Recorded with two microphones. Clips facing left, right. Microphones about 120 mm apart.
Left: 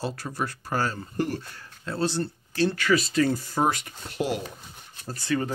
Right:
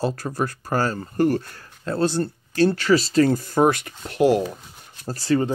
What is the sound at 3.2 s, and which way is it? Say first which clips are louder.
Speech: right 5 dB; 45° right (ahead or behind).